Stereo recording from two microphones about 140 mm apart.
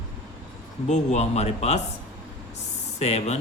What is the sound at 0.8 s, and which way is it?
Speech, 55° left (ahead or behind).